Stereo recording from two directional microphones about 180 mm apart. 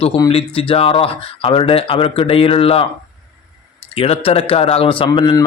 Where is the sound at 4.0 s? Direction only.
35° left (ahead or behind).